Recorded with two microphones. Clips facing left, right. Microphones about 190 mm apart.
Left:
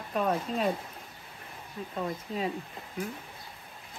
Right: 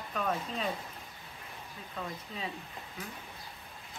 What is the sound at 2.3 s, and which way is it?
Speech, 40° left (ahead or behind).